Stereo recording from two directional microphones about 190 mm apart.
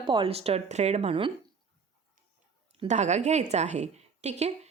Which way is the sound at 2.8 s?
35° right (ahead or behind).